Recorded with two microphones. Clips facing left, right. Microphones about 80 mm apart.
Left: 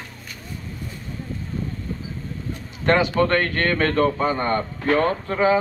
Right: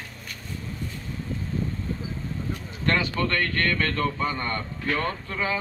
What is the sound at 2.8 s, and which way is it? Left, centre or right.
A man's voice, left.